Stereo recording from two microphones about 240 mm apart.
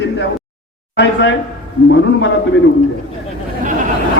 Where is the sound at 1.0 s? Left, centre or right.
Left.